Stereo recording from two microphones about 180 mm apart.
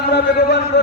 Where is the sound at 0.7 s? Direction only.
75° left (ahead or behind).